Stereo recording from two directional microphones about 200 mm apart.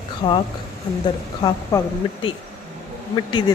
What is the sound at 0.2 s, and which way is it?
Speech, 25° left (ahead or behind).